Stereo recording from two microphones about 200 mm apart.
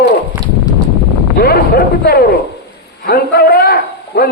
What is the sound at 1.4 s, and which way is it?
A man's voice, 50° left (ahead or behind).